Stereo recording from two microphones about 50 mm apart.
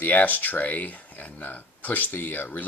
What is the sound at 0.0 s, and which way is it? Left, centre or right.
Speech, left.